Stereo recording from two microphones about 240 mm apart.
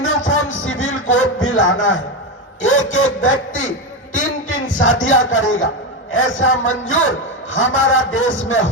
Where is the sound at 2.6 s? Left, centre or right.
Left.